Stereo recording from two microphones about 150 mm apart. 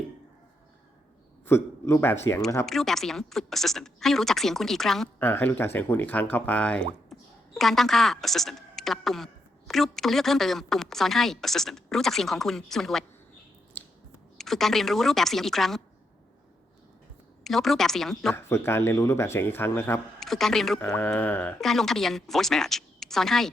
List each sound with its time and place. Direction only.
1.5 s speech: 15° left (ahead or behind)
2.6 s speech: centre (ahead or behind)
5.2 s speech: 15° left (ahead or behind)
13.8 s finger snapping: 10° left (ahead or behind)
14.3 s speech: centre (ahead or behind)
17.4 s speech: centre (ahead or behind)
18.4 s speech: 15° left (ahead or behind)
20.1 s speech: centre (ahead or behind)